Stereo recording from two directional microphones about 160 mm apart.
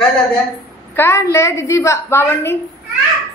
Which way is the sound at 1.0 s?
15° left (ahead or behind).